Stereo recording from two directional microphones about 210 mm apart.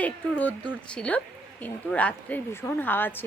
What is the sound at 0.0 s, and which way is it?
A woman's voice, 5° left (ahead or behind).